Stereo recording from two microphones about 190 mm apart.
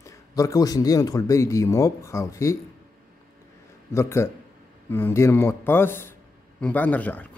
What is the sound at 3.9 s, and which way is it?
A man's voice, 15° left (ahead or behind).